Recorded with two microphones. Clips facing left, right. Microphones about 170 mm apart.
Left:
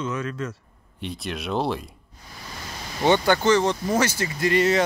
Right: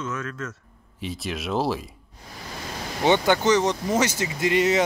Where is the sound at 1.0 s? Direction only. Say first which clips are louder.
Even; centre (ahead or behind).